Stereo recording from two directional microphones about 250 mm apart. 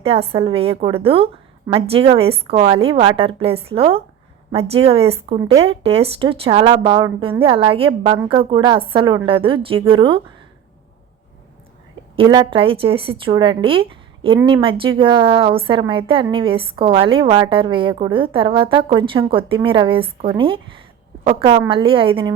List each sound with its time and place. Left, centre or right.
0.0 s a woman's voice: right
12.1 s a woman's voice: centre
21.7 s a woman's voice: right